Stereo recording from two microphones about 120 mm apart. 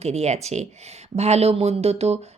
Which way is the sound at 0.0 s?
65° right (ahead or behind).